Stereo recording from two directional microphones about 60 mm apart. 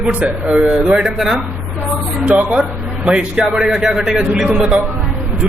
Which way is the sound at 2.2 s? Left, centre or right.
Right.